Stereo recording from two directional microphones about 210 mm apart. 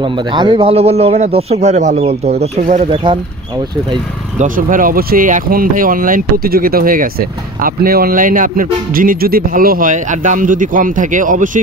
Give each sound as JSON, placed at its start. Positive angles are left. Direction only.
{"t": 0.0, "sound": "speech", "side_deg": -25}
{"t": 4.4, "sound": "speech", "side_deg": -40}